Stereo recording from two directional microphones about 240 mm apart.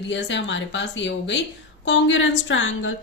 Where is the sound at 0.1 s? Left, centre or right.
Left.